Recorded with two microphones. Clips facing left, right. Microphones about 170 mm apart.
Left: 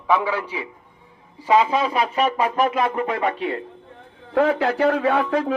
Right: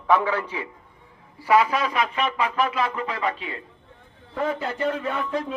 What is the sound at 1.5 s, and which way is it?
Speech, 25° left (ahead or behind).